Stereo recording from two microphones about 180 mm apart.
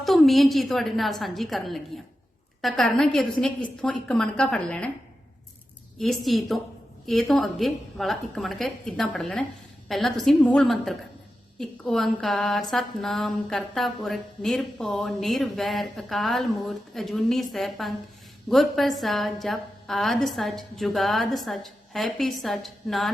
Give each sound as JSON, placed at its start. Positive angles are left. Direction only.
{"t": 0.0, "sound": "speech", "side_deg": 0}
{"t": 6.0, "sound": "speech", "side_deg": 0}